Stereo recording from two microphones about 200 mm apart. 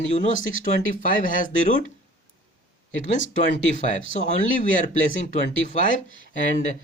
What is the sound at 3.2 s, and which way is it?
Speech, 65° left (ahead or behind).